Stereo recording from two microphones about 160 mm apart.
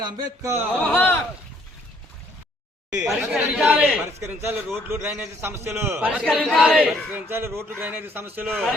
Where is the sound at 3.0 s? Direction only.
5° right (ahead or behind).